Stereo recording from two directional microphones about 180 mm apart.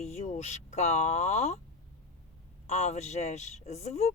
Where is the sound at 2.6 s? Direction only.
40° left (ahead or behind).